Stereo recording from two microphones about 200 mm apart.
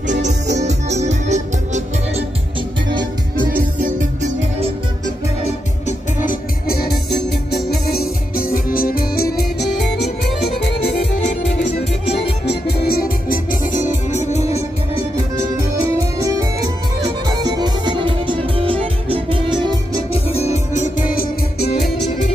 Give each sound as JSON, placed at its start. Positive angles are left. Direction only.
{"t": 0.6, "sound": "music", "side_deg": -35}
{"t": 5.4, "sound": "music", "side_deg": 40}
{"t": 9.6, "sound": "music", "side_deg": 0}
{"t": 11.0, "sound": "music", "side_deg": 30}
{"t": 12.4, "sound": "music", "side_deg": 50}
{"t": 16.2, "sound": "music", "side_deg": -15}
{"t": 20.2, "sound": "music", "side_deg": 35}